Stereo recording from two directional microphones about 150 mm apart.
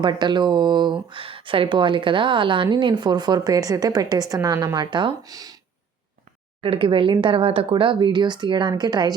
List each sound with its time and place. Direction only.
0.0 s a woman's voice: 30° right (ahead or behind)
6.6 s speech: 35° right (ahead or behind)